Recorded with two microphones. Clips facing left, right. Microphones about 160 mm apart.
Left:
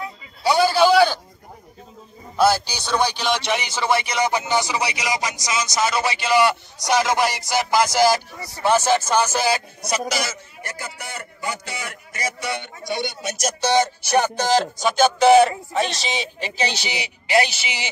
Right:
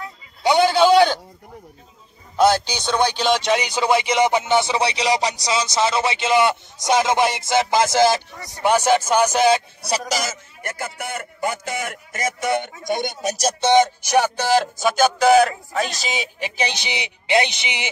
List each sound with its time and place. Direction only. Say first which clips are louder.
0.4 s a sound: right 1 dB; 20° right (ahead or behind)
2.5 s speech: right 2 dB; 10° left (ahead or behind)
3.3 s speech: right 4 dB; 15° right (ahead or behind)
9.8 s a man's voice: right 1 dB; 35° right (ahead or behind); by 17.8 s 15° right (ahead or behind)